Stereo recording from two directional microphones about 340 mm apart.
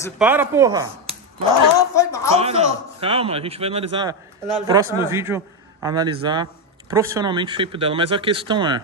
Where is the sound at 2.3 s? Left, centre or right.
Centre.